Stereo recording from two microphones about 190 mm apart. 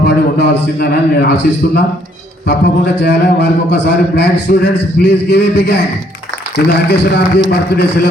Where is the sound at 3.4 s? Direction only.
65° left (ahead or behind).